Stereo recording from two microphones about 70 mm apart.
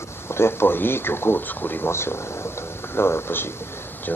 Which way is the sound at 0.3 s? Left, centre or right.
Left.